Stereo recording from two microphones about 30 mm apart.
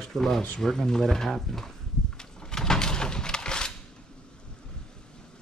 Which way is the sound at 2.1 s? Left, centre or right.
Left.